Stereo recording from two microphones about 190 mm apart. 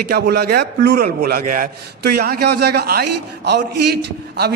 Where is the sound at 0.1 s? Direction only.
55° right (ahead or behind).